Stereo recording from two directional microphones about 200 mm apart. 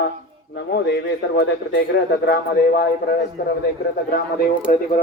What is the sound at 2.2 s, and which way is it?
Speech, 55° left (ahead or behind).